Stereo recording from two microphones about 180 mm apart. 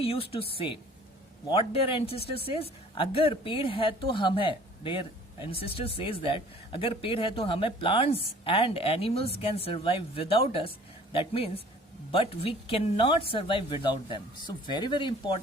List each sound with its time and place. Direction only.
0.0 s speech: 30° left (ahead or behind)